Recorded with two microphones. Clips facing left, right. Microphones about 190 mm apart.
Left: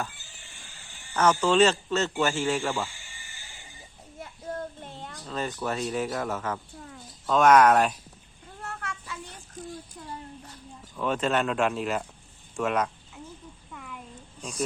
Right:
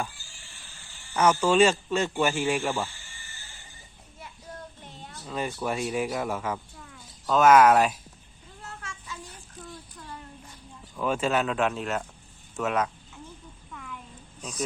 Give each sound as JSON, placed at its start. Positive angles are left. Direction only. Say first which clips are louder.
{"t": 0.1, "sound": "a sound", "louder": "left 1 dB", "side_deg": 20}
{"t": 1.1, "sound": "speech", "louder": "right 1 dB", "side_deg": -10}
{"t": 2.9, "sound": "music", "louder": "left 1 dB", "side_deg": 15}
{"t": 4.2, "sound": "child singing", "louder": "left 8 dB", "side_deg": 55}
{"t": 5.2, "sound": "speech", "louder": "right 1 dB", "side_deg": -10}
{"t": 6.7, "sound": "bird", "louder": "left 4 dB", "side_deg": 45}
{"t": 7.3, "sound": "speech", "louder": "right 1 dB", "side_deg": -5}
{"t": 8.6, "sound": "a sound", "louder": "left 5 dB", "side_deg": 60}
{"t": 10.9, "sound": "speech", "louder": "even", "side_deg": -5}
{"t": 13.7, "sound": "a sound", "louder": "right 1 dB", "side_deg": 5}